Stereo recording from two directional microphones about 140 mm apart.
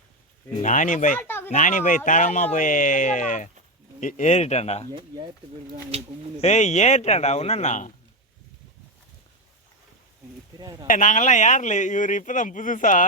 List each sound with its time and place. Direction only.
0.6 s speech: 65° left (ahead or behind)
1.2 s a sound: 15° left (ahead or behind)
1.5 s speech: 65° left (ahead or behind); by 4.9 s 50° left (ahead or behind)
4.9 s speech: 30° right (ahead or behind)
5.9 s speech: 45° right (ahead or behind)
6.4 s speech: 55° left (ahead or behind)
10.6 s speech: 25° right (ahead or behind)
10.8 s speech: 65° left (ahead or behind)